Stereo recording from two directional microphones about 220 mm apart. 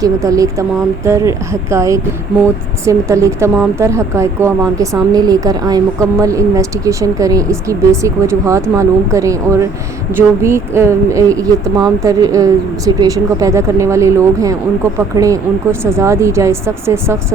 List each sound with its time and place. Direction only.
0.0 s speech: 15° right (ahead or behind)